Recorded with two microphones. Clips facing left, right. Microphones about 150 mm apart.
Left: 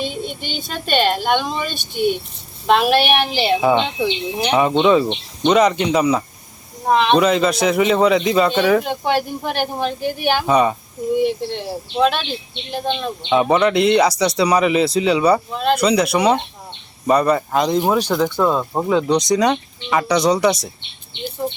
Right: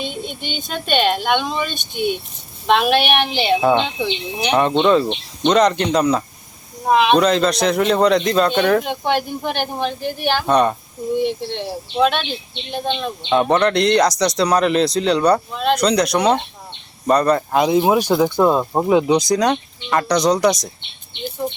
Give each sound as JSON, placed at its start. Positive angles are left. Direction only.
{"t": 0.0, "sound": "speech", "side_deg": 0}
{"t": 6.8, "sound": "speech", "side_deg": -5}
{"t": 7.2, "sound": "speech", "side_deg": 5}